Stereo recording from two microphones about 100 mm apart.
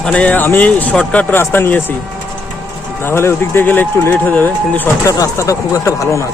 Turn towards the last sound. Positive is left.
turn(degrees=30)  # may be behind; listen again after turning